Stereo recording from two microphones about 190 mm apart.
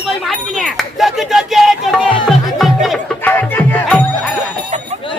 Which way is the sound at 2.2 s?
Centre (ahead or behind).